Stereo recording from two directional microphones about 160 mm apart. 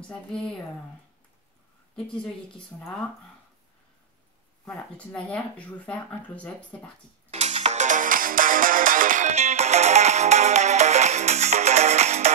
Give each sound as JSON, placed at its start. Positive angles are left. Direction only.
{"t": 0.0, "sound": "speech", "side_deg": 5}
{"t": 4.6, "sound": "speech", "side_deg": 5}
{"t": 7.2, "sound": "music", "side_deg": -40}